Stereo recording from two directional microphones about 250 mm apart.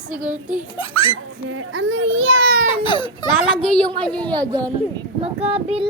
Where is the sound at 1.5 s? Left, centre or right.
Right.